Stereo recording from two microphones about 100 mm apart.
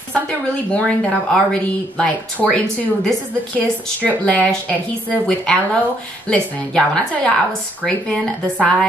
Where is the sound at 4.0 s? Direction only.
10° left (ahead or behind).